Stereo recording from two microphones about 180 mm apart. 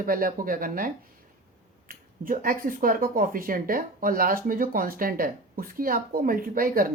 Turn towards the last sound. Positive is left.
turn(degrees=-50)  # may be behind; listen again after turning